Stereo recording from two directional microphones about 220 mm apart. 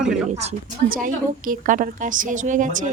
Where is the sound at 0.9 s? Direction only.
40° right (ahead or behind).